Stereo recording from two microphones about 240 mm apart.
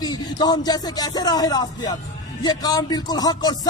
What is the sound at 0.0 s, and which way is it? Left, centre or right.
Speech, centre.